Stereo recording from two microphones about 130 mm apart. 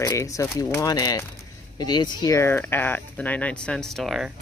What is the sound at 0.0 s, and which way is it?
Speech, 25° left (ahead or behind).